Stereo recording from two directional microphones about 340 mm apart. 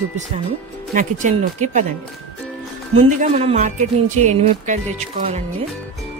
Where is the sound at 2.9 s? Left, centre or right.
Centre.